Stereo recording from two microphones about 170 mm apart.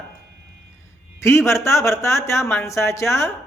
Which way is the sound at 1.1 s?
15° left (ahead or behind).